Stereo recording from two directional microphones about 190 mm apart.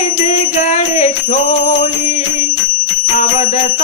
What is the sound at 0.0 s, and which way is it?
Music, 40° left (ahead or behind).